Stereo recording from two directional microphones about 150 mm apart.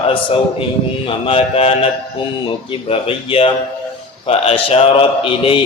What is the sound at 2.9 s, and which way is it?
Mantra, 40° left (ahead or behind).